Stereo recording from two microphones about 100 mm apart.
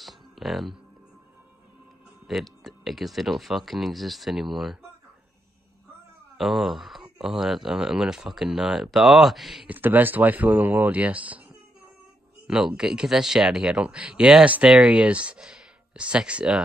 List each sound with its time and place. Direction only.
0.0 s music: centre (ahead or behind)
2.2 s speech: centre (ahead or behind)
6.3 s speech: centre (ahead or behind)
9.7 s speech: 20° right (ahead or behind)